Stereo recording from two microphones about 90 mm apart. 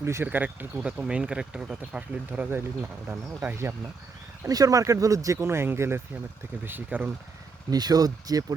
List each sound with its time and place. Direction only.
0.0 s speech: 30° right (ahead or behind)
0.3 s speech: 20° right (ahead or behind)
0.9 s speech: 10° right (ahead or behind)
2.5 s speech: 25° right (ahead or behind)
4.4 s speech: 40° right (ahead or behind); by 7.1 s 20° right (ahead or behind)
7.7 s speech: 45° right (ahead or behind)